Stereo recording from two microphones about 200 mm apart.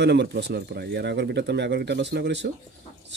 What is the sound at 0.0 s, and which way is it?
Speech, 55° right (ahead or behind).